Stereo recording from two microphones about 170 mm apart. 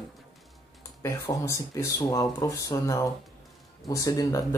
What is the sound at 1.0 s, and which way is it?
Speech, 15° left (ahead or behind).